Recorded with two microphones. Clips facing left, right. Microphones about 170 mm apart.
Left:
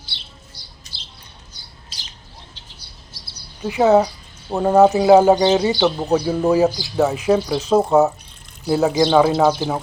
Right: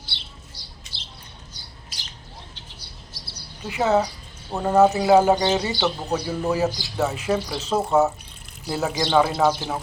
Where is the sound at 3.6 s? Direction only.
15° left (ahead or behind).